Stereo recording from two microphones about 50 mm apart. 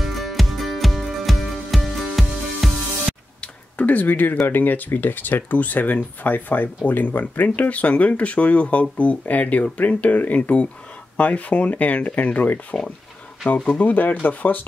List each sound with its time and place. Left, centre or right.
0.0 s music: centre
3.3 s a sound: left
4.5 s speech: left
13.7 s speech: left